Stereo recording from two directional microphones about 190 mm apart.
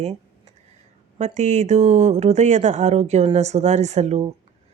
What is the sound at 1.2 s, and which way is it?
A woman's voice, 35° right (ahead or behind).